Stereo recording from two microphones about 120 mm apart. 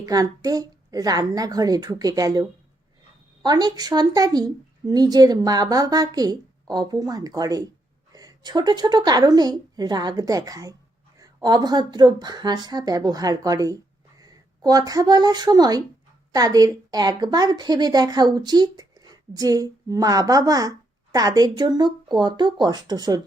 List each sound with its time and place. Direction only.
0.0 s a woman's voice: 30° right (ahead or behind)